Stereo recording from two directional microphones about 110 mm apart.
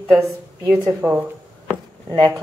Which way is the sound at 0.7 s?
10° right (ahead or behind).